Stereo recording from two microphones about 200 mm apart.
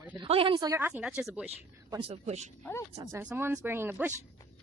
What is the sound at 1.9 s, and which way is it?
Speech, 30° right (ahead or behind).